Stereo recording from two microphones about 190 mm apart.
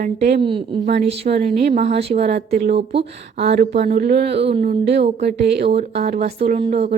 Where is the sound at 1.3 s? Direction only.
50° right (ahead or behind).